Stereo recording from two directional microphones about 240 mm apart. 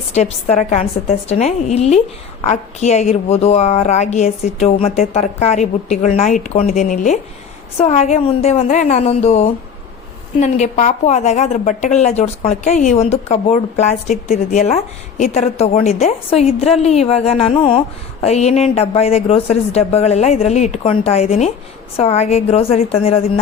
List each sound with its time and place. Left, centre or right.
0.1 s speech: left